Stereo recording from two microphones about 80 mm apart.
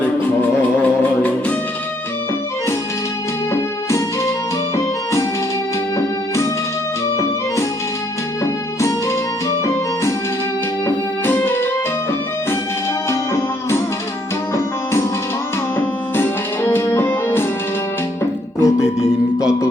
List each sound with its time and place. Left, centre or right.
0.8 s music: centre
3.5 s music: left
6.0 s music: left
9.6 s music: left
10.8 s music: left
13.1 s music: left
15.8 s music: left
18.6 s music: centre